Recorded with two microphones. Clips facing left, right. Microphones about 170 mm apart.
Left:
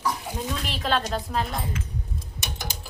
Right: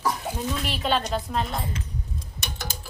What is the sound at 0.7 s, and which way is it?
Speech, centre (ahead or behind).